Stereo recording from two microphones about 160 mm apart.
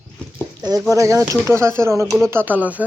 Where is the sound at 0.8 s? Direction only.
20° right (ahead or behind).